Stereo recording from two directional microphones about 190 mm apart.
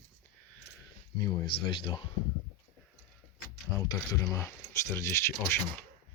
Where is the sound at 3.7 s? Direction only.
Centre (ahead or behind).